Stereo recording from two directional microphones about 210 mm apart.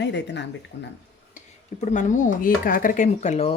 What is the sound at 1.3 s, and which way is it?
Speech, 35° left (ahead or behind).